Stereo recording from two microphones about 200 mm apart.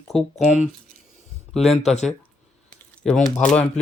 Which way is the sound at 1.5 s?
Centre (ahead or behind).